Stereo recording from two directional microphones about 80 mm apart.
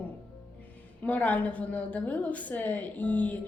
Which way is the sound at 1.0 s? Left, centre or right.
Centre.